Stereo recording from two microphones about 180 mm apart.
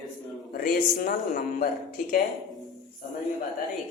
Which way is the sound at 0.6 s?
50° left (ahead or behind).